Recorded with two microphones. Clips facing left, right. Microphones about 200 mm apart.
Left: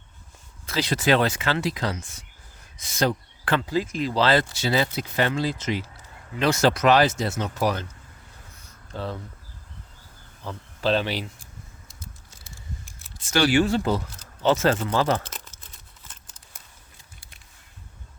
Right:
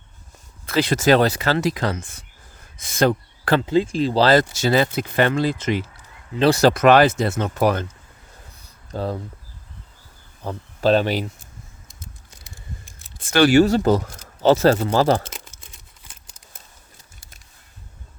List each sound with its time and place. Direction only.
0.6 s speech: 55° right (ahead or behind)
3.7 s speech: 30° right (ahead or behind); by 5.8 s 55° right (ahead or behind)
6.4 s speech: 35° right (ahead or behind)
6.7 s speech: 55° right (ahead or behind)
8.5 s a sound: 40° right (ahead or behind)
10.4 s speech: 45° right (ahead or behind)
11.9 s a sound: 20° right (ahead or behind)
13.1 s speech: 55° right (ahead or behind)
13.6 s speech: 40° right (ahead or behind)
15.3 s crumpling: 10° right (ahead or behind)